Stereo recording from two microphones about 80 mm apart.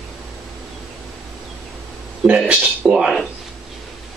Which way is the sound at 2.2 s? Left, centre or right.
Centre.